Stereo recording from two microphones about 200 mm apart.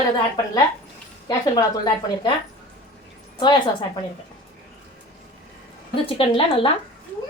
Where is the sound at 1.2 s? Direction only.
20° left (ahead or behind).